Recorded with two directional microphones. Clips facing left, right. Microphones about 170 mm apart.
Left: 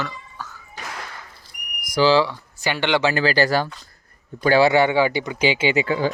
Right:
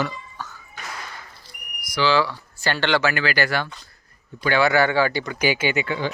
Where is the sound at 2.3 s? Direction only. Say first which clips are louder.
Even; 15° left (ahead or behind).